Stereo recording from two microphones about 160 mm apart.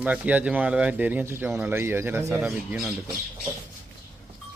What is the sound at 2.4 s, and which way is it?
Speech, 5° right (ahead or behind).